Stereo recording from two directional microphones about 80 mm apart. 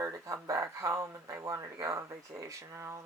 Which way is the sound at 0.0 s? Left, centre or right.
Right.